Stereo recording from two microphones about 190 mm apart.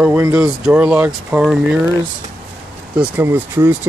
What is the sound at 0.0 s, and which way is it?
Speech, 10° right (ahead or behind).